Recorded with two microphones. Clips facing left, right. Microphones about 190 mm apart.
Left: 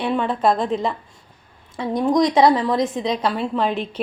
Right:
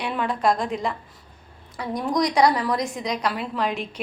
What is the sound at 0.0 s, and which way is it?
A woman's voice, 30° left (ahead or behind).